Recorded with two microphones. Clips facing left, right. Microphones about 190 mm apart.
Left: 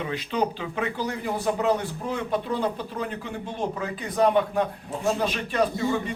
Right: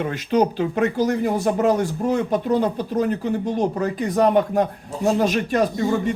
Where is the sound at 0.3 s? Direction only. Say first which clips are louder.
Right 9 dB; 45° right (ahead or behind).